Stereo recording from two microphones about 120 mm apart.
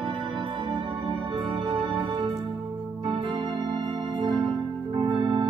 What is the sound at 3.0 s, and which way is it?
Organ, 45° right (ahead or behind).